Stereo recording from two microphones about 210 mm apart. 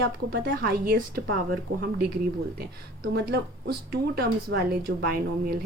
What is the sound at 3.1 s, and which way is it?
Speech, 50° right (ahead or behind).